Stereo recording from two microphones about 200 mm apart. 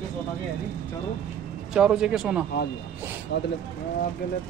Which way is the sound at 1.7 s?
5° right (ahead or behind).